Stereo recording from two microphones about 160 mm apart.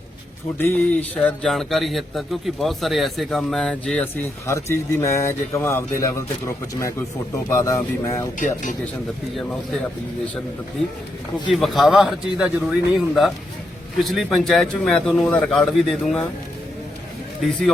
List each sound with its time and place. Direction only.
0.6 s speech: 10° left (ahead or behind)
4.4 s speech: 15° left (ahead or behind)
7.5 s speech: 20° left (ahead or behind)
8.4 s speech: 55° left (ahead or behind)
11.5 s speech: centre (ahead or behind)